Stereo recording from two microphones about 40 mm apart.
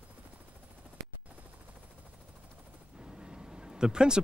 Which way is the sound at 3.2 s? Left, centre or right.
Centre.